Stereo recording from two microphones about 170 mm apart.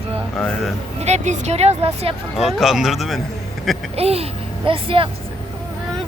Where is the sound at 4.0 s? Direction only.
35° right (ahead or behind).